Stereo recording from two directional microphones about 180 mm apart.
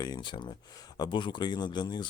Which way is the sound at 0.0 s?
25° left (ahead or behind).